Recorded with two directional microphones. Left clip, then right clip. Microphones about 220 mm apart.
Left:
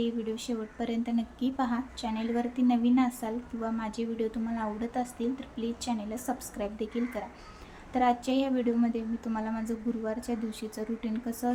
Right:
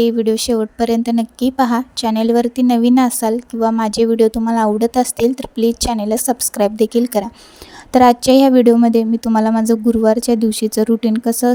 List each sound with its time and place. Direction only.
0.0 s a woman's voice: 50° right (ahead or behind)